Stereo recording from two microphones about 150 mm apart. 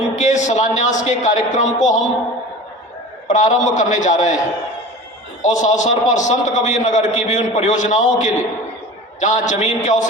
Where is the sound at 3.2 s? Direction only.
55° left (ahead or behind).